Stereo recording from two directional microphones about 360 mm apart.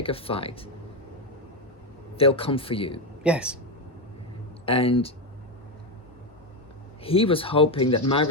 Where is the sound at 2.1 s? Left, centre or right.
Centre.